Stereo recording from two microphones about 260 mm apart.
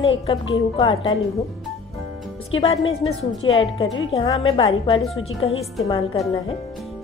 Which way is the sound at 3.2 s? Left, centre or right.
Left.